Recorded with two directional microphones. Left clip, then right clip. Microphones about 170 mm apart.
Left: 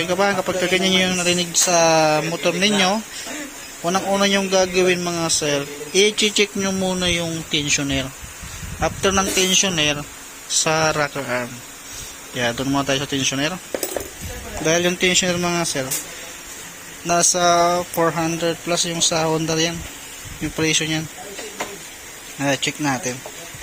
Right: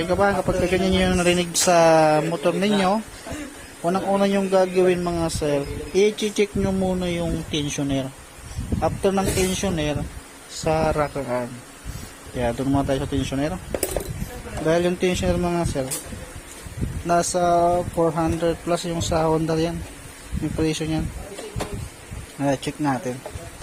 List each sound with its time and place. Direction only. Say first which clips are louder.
0.0 s a man's voice: left 1 dB; 10° right (ahead or behind)
1.0 s a man's voice: left 1 dB; 30° right (ahead or behind); by 13.6 s 10° right (ahead or behind)
14.6 s a man's voice: left 2 dB; 5° right (ahead or behind)
17.1 s a man's voice: left 3 dB; 10° right (ahead or behind)
22.4 s a man's voice: left 3 dB; 10° right (ahead or behind)